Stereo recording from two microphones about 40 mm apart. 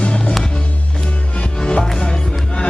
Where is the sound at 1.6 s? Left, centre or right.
Left.